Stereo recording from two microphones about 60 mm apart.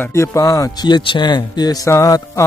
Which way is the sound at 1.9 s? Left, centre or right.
Left.